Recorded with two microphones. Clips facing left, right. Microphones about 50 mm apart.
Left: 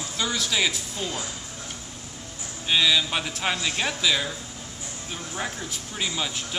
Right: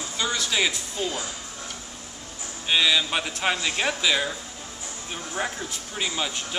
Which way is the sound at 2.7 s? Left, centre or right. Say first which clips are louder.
Even; centre.